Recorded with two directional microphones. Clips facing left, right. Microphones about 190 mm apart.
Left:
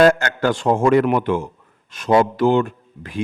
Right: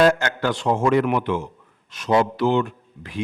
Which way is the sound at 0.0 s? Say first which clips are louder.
Left 3 dB; 50° left (ahead or behind).